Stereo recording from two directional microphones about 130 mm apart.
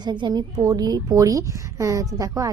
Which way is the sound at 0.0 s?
35° right (ahead or behind).